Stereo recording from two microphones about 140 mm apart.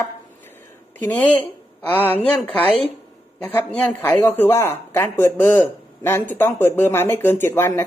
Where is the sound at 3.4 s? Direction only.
10° left (ahead or behind).